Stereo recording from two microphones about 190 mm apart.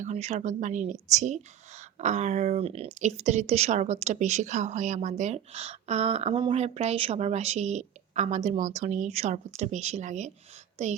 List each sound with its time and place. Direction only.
0.0 s a woman's voice: 35° right (ahead or behind)